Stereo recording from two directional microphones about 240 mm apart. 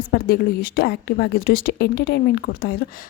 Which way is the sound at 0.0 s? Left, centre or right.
Left.